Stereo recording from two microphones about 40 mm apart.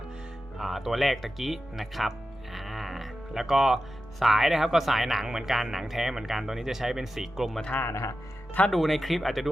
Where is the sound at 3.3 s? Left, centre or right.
Centre.